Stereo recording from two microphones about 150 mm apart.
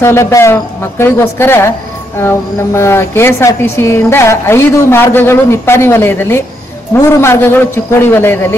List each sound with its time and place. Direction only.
0.0 s speech: 20° left (ahead or behind)